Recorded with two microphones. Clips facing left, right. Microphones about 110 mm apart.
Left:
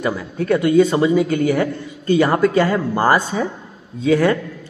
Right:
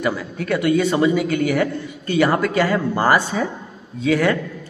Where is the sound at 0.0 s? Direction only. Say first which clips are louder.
Left 1 dB; 25° left (ahead or behind).